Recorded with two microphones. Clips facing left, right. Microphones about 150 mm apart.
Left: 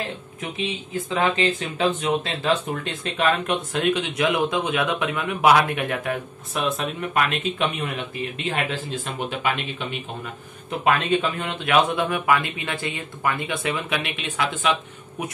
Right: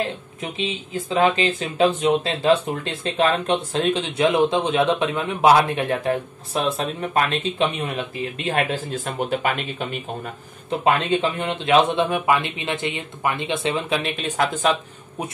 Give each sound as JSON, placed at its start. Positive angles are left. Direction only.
{"t": 0.9, "sound": "speech", "side_deg": -30}
{"t": 8.5, "sound": "speech", "side_deg": -40}
{"t": 10.8, "sound": "speech", "side_deg": -30}